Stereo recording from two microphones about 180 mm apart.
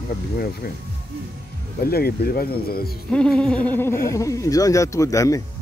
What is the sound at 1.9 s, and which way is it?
Speech, 55° left (ahead or behind).